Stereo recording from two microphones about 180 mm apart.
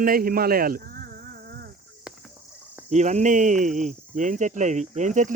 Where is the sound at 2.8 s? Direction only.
40° right (ahead or behind).